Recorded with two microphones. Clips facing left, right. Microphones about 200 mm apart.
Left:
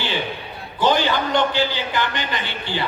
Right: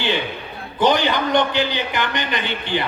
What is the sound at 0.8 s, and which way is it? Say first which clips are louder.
A man's voice: right 1 dB; 20° right (ahead or behind).